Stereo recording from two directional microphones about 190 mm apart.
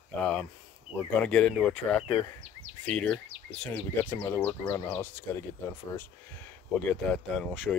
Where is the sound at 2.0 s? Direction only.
30° left (ahead or behind).